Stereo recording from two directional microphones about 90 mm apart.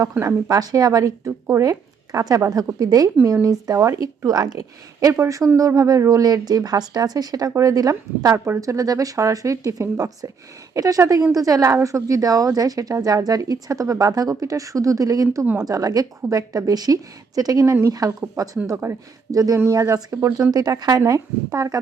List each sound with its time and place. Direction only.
0.1 s a woman's voice: 30° right (ahead or behind)
1.3 s speech: 25° right (ahead or behind)
2.2 s a woman's voice: 40° right (ahead or behind)